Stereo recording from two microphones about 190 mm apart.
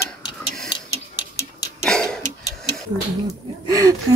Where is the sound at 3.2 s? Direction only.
20° right (ahead or behind).